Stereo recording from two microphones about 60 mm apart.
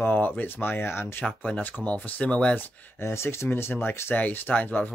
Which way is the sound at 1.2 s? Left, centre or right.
Centre.